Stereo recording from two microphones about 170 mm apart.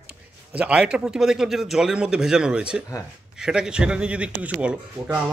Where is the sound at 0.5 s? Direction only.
5° right (ahead or behind).